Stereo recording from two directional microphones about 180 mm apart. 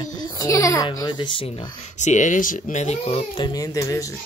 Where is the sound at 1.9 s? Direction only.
40° left (ahead or behind); by 4.1 s 20° left (ahead or behind).